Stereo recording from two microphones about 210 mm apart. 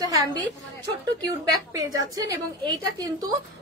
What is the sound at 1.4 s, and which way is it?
A woman's voice, 15° right (ahead or behind).